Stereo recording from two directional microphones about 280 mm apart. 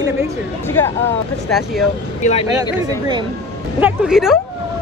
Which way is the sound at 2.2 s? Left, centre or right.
Left.